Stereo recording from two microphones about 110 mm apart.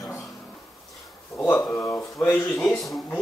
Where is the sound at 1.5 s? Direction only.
20° left (ahead or behind).